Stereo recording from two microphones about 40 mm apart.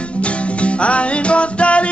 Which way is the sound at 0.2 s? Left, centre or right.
Left.